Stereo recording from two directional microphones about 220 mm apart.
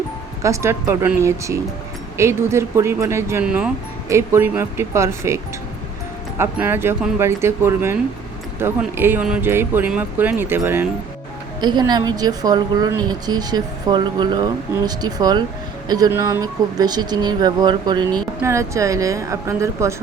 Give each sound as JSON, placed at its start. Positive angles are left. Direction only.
{"t": 0.4, "sound": "speech", "side_deg": -15}
{"t": 6.4, "sound": "a woman's voice", "side_deg": -10}